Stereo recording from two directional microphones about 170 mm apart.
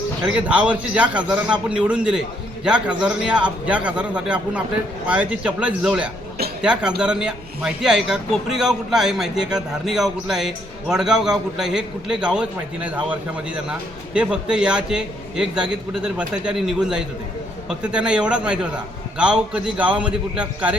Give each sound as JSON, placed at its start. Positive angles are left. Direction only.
{"t": 0.3, "sound": "a man's voice", "side_deg": -10}